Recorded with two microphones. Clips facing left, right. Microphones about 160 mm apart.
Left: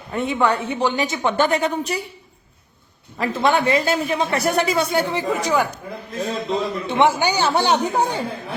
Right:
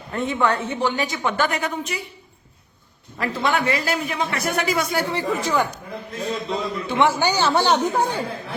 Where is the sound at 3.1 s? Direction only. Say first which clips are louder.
Left 3 dB; 20° left (ahead or behind).